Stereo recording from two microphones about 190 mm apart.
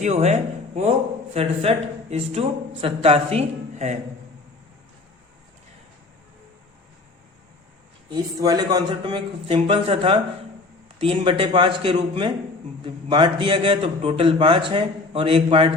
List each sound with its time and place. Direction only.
0.0 s speech: 35° right (ahead or behind)
8.1 s a man's voice: 20° right (ahead or behind)